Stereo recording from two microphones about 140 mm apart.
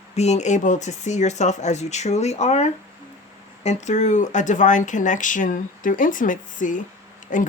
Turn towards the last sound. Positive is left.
turn(degrees=70)  # may be behind; listen again after turning